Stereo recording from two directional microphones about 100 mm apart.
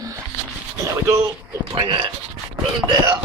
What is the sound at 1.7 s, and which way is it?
Speech, 55° right (ahead or behind).